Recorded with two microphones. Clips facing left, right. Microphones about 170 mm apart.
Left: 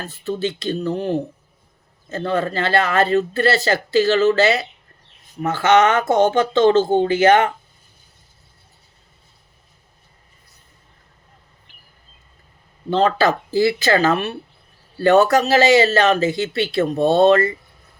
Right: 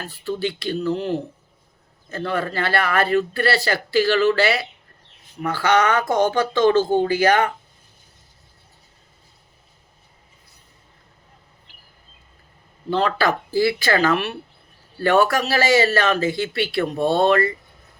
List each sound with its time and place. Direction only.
0.0 s speech: 20° left (ahead or behind)
12.9 s speech: 20° left (ahead or behind)